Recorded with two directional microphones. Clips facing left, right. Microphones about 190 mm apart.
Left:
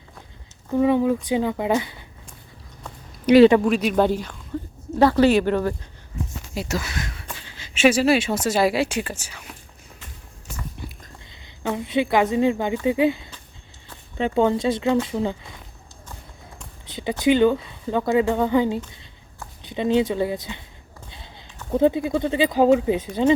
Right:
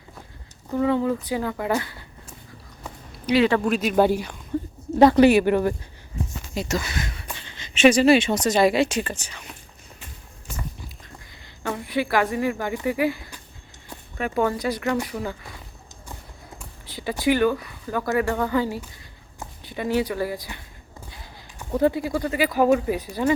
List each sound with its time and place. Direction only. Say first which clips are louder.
0.8 s speech: left 3 dB; 15° left (ahead or behind)
3.3 s speech: left 7 dB; 60° left (ahead or behind)
3.6 s speech: even; centre (ahead or behind)
6.5 s speech: right 1 dB; 5° left (ahead or behind)
11.3 s speech: left 3 dB; 20° left (ahead or behind)
16.8 s speech: left 3 dB; 20° left (ahead or behind)
21.7 s speech: left 2 dB; 20° left (ahead or behind)